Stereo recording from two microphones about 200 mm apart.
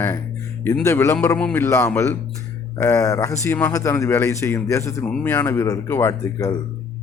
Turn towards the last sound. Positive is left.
turn(degrees=15)  # may be behind; listen again after turning